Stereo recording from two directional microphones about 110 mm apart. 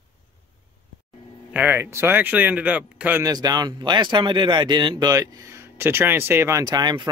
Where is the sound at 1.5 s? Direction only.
15° right (ahead or behind).